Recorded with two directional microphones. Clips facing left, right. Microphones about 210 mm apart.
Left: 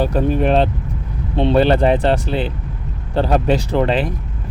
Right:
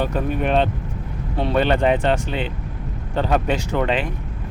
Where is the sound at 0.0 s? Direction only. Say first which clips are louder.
Left 5 dB; 35° left (ahead or behind).